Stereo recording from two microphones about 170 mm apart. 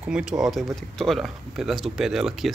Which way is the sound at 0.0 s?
5° right (ahead or behind).